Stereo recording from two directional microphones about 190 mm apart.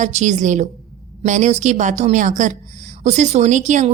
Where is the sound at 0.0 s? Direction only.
40° right (ahead or behind).